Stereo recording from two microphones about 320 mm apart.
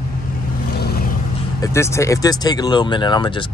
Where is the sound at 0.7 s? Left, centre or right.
Left.